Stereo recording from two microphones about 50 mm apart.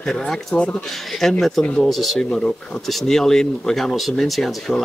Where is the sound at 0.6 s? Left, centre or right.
Centre.